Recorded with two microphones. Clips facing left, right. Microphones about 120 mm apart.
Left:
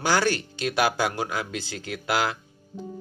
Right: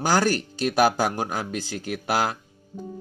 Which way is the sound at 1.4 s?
90° left.